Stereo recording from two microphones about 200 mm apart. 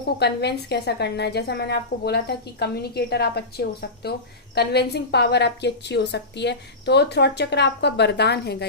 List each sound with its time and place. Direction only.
0.2 s a woman's voice: 55° left (ahead or behind)